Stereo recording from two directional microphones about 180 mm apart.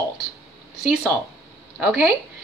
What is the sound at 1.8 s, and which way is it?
Speech, centre (ahead or behind).